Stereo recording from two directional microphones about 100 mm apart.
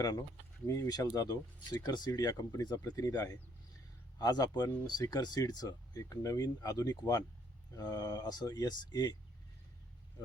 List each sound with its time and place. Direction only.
0.0 s speech: 35° left (ahead or behind)